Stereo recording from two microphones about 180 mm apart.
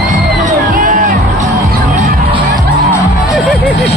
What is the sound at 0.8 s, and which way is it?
Music, 50° right (ahead or behind).